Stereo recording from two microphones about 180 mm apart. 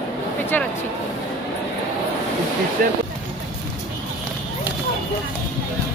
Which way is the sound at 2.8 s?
50° right (ahead or behind).